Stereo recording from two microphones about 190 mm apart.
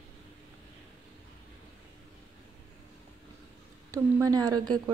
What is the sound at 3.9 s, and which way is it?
Speech, 20° right (ahead or behind).